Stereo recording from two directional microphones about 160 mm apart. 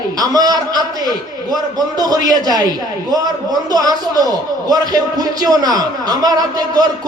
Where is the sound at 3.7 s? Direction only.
25° right (ahead or behind).